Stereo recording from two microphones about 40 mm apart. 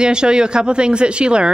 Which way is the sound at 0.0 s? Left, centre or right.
Right.